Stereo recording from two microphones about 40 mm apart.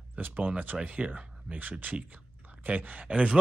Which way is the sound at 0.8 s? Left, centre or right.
Right.